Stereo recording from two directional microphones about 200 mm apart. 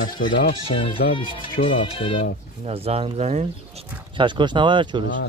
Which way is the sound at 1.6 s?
25° left (ahead or behind).